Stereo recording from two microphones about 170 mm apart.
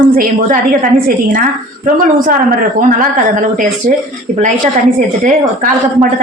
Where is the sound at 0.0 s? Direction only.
55° right (ahead or behind).